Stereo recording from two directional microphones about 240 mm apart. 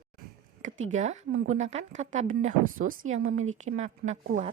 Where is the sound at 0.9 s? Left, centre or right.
Right.